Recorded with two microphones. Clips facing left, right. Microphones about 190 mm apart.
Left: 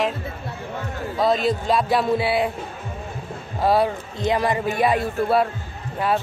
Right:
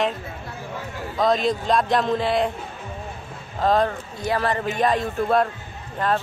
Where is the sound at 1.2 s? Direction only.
5° left (ahead or behind).